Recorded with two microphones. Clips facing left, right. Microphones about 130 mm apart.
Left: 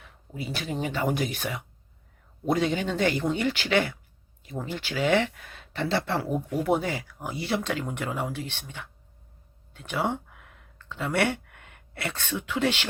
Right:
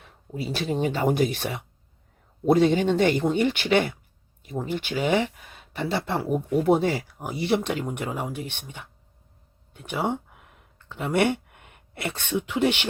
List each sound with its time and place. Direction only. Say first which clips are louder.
0.0 s speech: right 4 dB; 35° right (ahead or behind); by 6.4 s 15° right (ahead or behind)
6.7 s speech: right 5 dB; 30° right (ahead or behind)